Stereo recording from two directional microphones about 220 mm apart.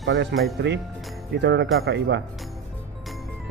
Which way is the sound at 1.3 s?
50° right (ahead or behind).